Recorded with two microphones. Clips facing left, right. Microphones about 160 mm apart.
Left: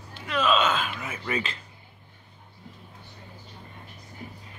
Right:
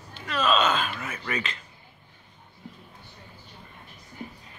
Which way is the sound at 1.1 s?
25° left (ahead or behind).